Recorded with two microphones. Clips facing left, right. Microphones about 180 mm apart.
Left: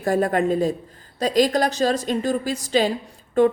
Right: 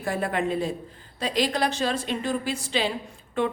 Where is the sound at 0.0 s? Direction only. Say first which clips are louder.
Left 7 dB; 40° left (ahead or behind).